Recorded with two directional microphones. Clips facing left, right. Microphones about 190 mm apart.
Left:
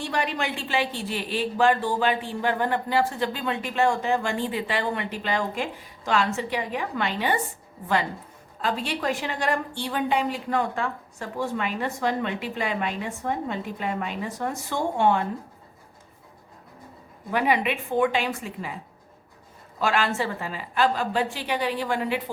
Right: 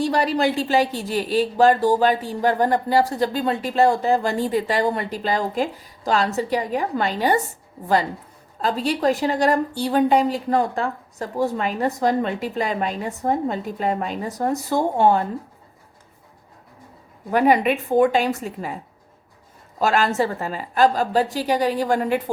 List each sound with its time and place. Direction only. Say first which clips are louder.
0.0 s speech: right 8 dB; 35° right (ahead or behind)
8.6 s speech: right 6 dB; 40° right (ahead or behind)
17.3 s speech: right 6 dB; 45° right (ahead or behind)
19.8 s speech: right 5 dB; 40° right (ahead or behind)